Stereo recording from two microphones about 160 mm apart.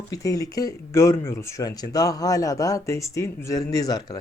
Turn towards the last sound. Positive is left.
turn(degrees=25)  # may be behind; listen again after turning